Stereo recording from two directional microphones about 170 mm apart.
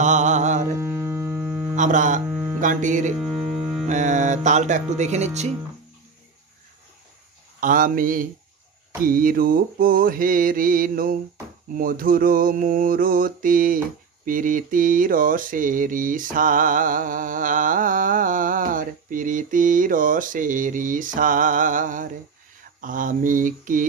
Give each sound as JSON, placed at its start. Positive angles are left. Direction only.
{"t": 0.0, "sound": "mantra", "side_deg": -45}
{"t": 0.7, "sound": "hum", "side_deg": -15}
{"t": 1.8, "sound": "mantra", "side_deg": -50}
{"t": 2.2, "sound": "mains hum", "side_deg": -15}
{"t": 2.6, "sound": "mantra", "side_deg": -50}
{"t": 7.6, "sound": "mantra", "side_deg": -55}